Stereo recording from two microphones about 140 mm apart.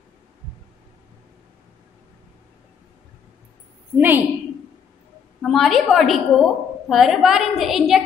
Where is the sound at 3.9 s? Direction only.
15° right (ahead or behind).